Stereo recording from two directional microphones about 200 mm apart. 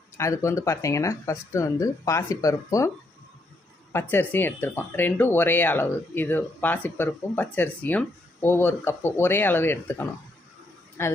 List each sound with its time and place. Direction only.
0.2 s speech: 15° left (ahead or behind)
4.1 s speech: 10° left (ahead or behind)